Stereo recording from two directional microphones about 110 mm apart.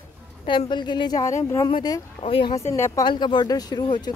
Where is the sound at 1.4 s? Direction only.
30° left (ahead or behind).